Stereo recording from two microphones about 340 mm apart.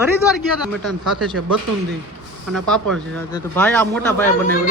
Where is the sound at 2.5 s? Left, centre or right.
Centre.